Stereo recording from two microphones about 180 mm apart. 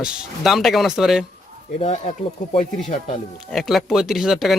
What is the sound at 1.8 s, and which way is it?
Speech, 35° left (ahead or behind).